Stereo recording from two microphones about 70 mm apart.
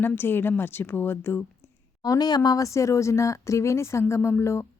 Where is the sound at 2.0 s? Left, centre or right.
Left.